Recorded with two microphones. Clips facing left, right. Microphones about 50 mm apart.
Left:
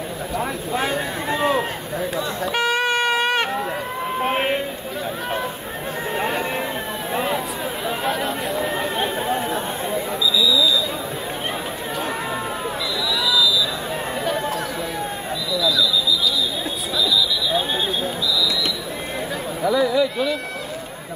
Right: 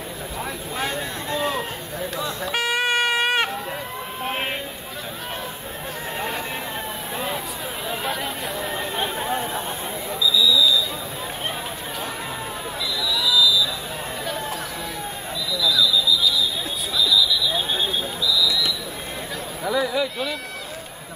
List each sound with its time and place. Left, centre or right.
0.4 s a sound: centre
2.4 s wind instrument: centre
4.2 s speech: left
6.1 s speech: left
8.0 s speech: centre
15.6 s alarm: centre
19.6 s speech: centre